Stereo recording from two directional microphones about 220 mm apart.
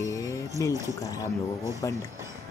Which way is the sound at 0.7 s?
15° right (ahead or behind).